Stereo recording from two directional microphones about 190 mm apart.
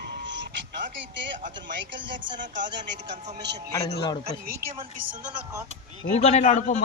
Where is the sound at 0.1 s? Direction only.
70° right (ahead or behind).